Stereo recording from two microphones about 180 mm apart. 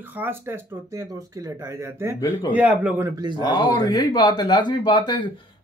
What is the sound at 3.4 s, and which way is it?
Speech, 25° left (ahead or behind).